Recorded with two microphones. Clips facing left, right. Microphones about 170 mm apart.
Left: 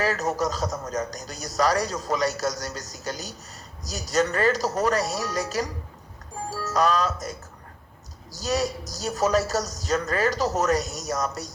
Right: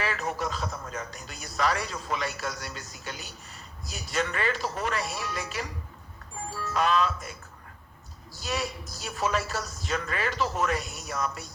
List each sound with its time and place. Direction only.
0.0 s a man's voice: 40° left (ahead or behind)